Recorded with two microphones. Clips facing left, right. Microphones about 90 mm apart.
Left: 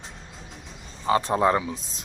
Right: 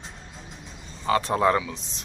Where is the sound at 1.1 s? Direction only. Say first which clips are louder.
Even; 20° left (ahead or behind).